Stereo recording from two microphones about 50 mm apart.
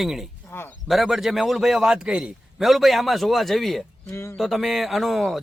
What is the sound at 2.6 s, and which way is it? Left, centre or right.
A man's voice, centre.